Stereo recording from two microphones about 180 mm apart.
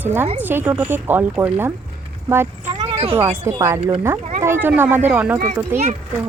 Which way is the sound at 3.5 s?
15° right (ahead or behind).